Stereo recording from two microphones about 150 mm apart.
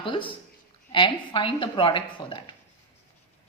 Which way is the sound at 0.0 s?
35° left (ahead or behind).